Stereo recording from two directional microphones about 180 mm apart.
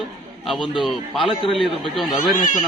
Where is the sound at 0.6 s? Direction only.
25° left (ahead or behind).